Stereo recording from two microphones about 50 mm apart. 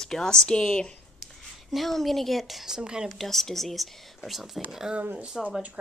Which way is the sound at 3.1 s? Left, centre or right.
Centre.